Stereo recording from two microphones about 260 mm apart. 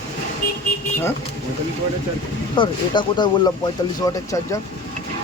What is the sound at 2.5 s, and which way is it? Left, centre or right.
Speech, centre.